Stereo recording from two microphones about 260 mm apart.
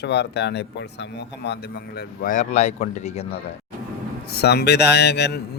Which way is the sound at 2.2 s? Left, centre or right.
Left.